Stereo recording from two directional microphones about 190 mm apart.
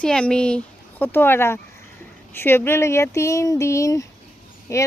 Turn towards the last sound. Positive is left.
turn(degrees=15)  # may be behind; listen again after turning